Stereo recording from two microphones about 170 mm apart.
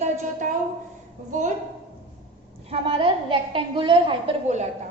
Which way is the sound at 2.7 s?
30° right (ahead or behind).